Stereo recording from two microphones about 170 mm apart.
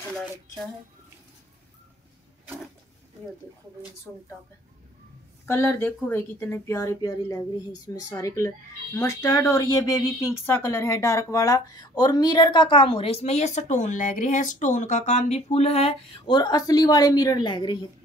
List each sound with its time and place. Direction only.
5.5 s a woman's voice: 15° left (ahead or behind)